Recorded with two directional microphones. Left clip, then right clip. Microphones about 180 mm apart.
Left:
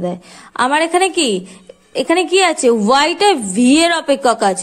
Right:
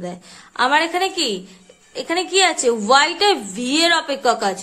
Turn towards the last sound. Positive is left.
turn(degrees=40)  # may be behind; listen again after turning